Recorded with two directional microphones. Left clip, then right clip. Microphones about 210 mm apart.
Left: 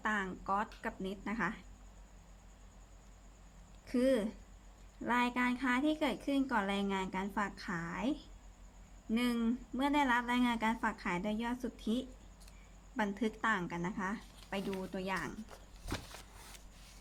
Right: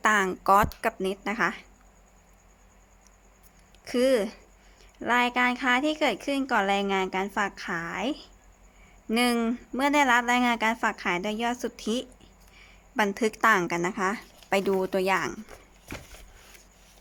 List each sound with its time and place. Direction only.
0.0 s speech: 55° right (ahead or behind)
3.8 s speech: 45° right (ahead or behind)